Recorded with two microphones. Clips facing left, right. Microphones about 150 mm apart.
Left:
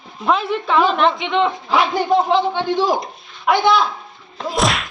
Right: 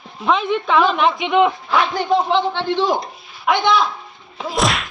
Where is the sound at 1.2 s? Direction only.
15° right (ahead or behind).